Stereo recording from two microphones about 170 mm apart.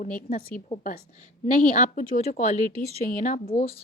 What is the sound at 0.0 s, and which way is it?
Speech, 50° left (ahead or behind).